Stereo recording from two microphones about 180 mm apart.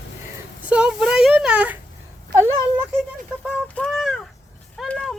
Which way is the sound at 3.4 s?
5° left (ahead or behind).